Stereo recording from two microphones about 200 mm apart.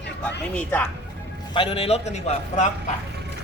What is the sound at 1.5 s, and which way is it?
A man's voice, 25° left (ahead or behind).